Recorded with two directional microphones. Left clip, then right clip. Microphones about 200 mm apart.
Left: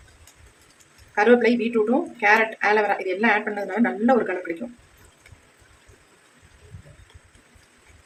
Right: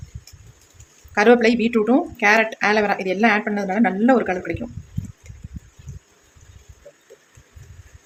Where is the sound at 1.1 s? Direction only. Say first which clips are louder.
Right 3 dB; 45° right (ahead or behind).